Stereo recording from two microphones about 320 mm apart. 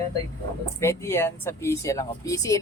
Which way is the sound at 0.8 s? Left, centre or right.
Centre.